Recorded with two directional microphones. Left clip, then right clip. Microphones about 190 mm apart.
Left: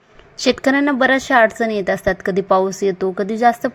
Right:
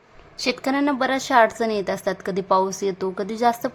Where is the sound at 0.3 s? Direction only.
25° left (ahead or behind).